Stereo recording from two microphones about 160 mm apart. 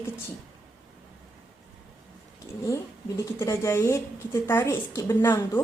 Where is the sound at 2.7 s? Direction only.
20° left (ahead or behind).